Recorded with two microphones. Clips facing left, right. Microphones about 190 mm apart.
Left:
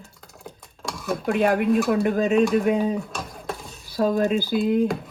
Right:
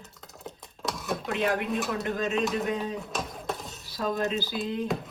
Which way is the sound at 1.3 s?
55° left (ahead or behind).